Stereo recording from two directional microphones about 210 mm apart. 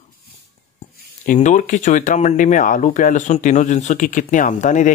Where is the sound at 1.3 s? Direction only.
35° left (ahead or behind).